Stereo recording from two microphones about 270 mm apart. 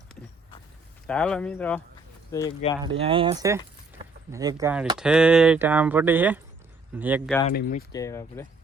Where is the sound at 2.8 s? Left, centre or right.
Centre.